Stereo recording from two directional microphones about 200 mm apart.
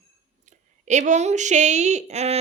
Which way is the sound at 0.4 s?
35° right (ahead or behind).